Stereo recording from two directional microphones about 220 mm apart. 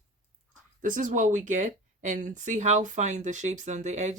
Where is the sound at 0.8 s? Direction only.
35° right (ahead or behind).